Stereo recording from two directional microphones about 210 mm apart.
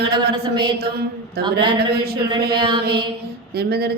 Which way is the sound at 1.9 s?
50° right (ahead or behind).